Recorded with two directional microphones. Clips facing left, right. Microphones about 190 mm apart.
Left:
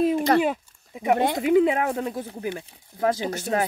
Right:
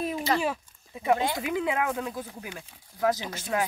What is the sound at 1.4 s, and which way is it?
Speech, 30° left (ahead or behind).